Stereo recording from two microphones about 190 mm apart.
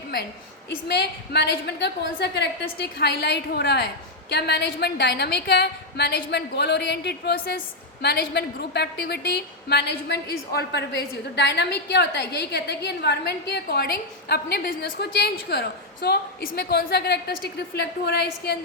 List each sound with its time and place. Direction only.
0.9 s a woman's voice: 60° left (ahead or behind)